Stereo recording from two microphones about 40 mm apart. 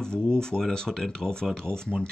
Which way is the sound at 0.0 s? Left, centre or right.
Left.